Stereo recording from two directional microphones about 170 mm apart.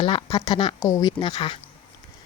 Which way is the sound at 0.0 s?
30° left (ahead or behind).